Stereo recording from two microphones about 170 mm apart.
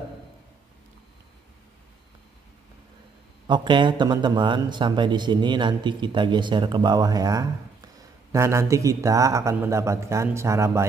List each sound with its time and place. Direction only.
3.4 s speech: 25° right (ahead or behind)